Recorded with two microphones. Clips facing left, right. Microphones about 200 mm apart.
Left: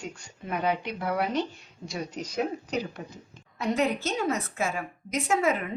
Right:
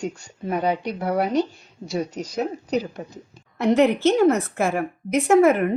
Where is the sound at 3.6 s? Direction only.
65° right (ahead or behind).